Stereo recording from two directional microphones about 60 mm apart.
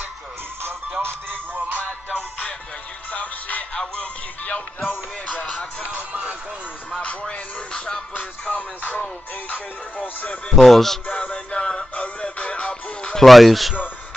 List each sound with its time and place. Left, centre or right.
0.9 s music: right
3.1 s music: left
6.9 s music: left
8.1 s music: left
10.5 s speech: centre
11.1 s music: centre
13.2 s speech: centre